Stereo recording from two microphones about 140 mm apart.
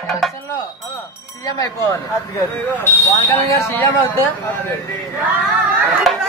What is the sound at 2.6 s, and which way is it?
Speech, 15° left (ahead or behind).